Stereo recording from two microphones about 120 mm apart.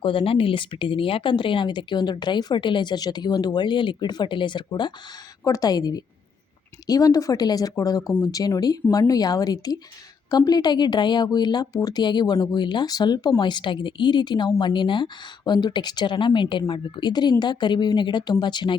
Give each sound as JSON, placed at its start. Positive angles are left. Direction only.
{"t": 0.0, "sound": "speech", "side_deg": 50}